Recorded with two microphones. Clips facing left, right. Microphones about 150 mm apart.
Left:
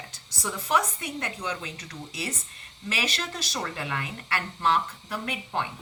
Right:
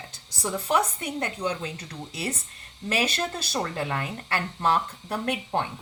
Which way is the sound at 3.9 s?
35° right (ahead or behind).